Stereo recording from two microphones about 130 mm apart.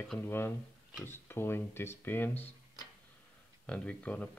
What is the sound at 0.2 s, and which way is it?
Speech, 15° left (ahead or behind).